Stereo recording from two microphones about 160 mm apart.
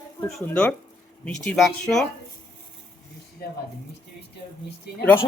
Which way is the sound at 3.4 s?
70° left (ahead or behind).